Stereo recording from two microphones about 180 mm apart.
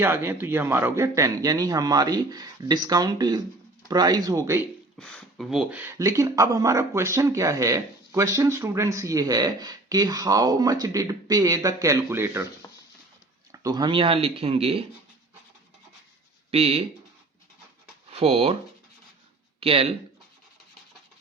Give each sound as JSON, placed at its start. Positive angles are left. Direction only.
{"t": 0.0, "sound": "speech", "side_deg": -15}
{"t": 4.9, "sound": "speech", "side_deg": 5}
{"t": 13.5, "sound": "speech", "side_deg": -20}
{"t": 16.5, "sound": "speech", "side_deg": -35}
{"t": 18.1, "sound": "speech", "side_deg": -35}
{"t": 19.5, "sound": "speech", "side_deg": -30}